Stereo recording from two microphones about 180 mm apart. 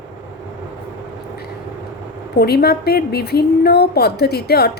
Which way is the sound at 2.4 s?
60° left (ahead or behind).